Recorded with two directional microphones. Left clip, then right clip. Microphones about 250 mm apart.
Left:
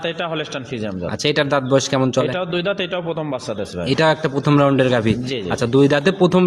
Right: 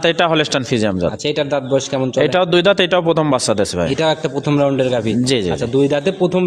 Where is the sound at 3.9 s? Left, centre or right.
Centre.